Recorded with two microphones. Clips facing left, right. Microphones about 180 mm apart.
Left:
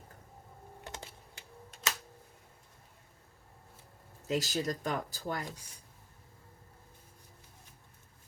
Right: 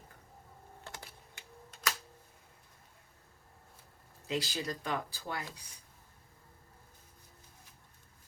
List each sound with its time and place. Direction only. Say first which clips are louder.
0.9 s typing: left 3 dB; 20° left (ahead or behind)
4.3 s speech: left 3 dB; 45° left (ahead or behind)